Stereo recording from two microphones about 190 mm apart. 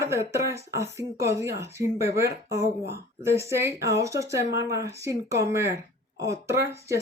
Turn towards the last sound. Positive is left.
turn(degrees=-15)  # may be behind; listen again after turning